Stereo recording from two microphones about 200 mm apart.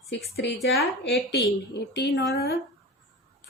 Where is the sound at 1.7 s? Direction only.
60° left (ahead or behind).